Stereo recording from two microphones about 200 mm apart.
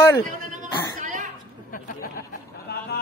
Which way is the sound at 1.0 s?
40° right (ahead or behind).